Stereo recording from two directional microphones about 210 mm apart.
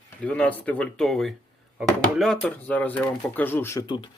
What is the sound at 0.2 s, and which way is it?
Speech, 5° left (ahead or behind).